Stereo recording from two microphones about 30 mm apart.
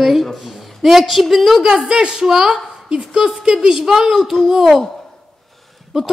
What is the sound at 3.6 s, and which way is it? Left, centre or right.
A woman's voice, centre.